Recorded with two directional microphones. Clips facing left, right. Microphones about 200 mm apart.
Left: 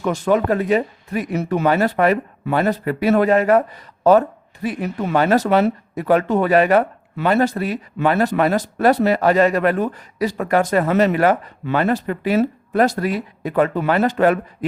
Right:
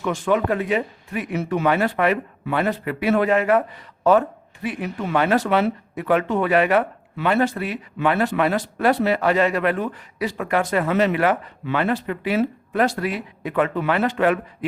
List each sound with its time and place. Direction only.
0.0 s speech: 40° left (ahead or behind)